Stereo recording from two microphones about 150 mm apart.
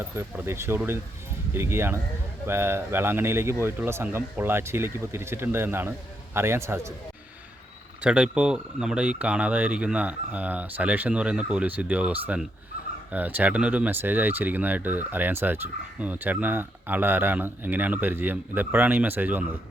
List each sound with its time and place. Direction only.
0.2 s speech: 15° right (ahead or behind)
8.0 s speech: 5° right (ahead or behind)